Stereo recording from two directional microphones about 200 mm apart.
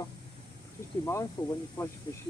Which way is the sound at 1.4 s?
25° left (ahead or behind).